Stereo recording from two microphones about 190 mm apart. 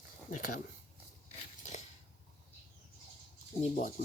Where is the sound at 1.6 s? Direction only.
40° left (ahead or behind).